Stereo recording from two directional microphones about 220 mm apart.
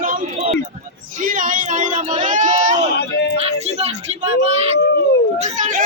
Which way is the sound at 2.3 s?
35° right (ahead or behind).